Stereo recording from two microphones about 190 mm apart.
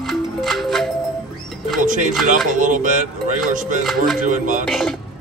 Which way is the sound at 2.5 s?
40° right (ahead or behind).